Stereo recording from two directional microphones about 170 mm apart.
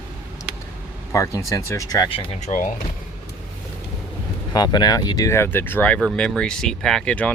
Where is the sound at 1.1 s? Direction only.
15° left (ahead or behind); by 2.5 s 30° left (ahead or behind).